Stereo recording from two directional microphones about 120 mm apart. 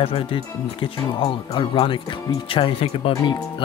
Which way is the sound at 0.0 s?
50° left (ahead or behind).